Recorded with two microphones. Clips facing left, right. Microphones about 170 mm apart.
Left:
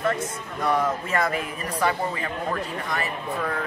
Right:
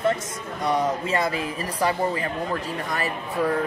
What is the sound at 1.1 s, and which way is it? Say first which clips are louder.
A woman's voice: right 1 dB; 25° right (ahead or behind).